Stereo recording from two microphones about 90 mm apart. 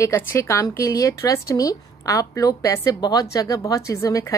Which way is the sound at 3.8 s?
30° left (ahead or behind).